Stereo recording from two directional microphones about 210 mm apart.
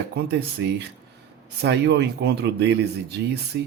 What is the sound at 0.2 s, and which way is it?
Speech, 50° right (ahead or behind).